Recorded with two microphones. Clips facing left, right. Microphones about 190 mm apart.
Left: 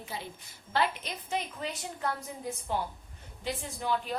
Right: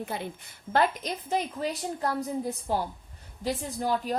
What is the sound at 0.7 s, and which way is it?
A woman's voice, 40° right (ahead or behind).